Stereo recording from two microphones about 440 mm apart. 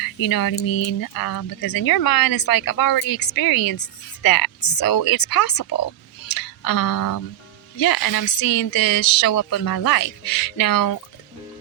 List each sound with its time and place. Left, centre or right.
0.0 s speech: left